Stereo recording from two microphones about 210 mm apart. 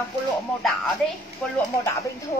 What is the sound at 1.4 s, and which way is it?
Speech, 5° left (ahead or behind).